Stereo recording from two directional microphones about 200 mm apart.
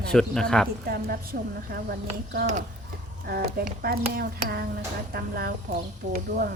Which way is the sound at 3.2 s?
50° right (ahead or behind).